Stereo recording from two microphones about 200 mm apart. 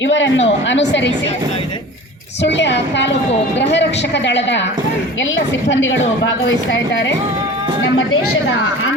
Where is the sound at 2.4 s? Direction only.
60° left (ahead or behind).